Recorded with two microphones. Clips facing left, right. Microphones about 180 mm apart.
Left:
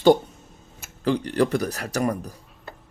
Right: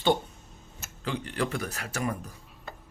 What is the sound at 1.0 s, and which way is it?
Speech, 40° left (ahead or behind).